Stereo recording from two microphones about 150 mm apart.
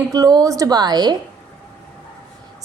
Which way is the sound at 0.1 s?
25° right (ahead or behind).